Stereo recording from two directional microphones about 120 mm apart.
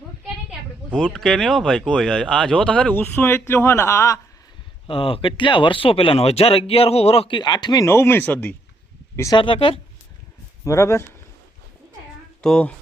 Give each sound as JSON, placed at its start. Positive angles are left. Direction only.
{"t": 0.9, "sound": "speech", "side_deg": 5}
{"t": 4.9, "sound": "speech", "side_deg": 50}
{"t": 7.3, "sound": "speech", "side_deg": 35}
{"t": 7.9, "sound": "speech", "side_deg": 20}
{"t": 9.3, "sound": "speech", "side_deg": 45}
{"t": 10.6, "sound": "speech", "side_deg": 25}
{"t": 12.4, "sound": "speech", "side_deg": 5}